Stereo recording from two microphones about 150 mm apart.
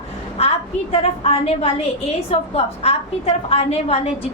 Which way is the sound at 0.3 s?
45° left (ahead or behind).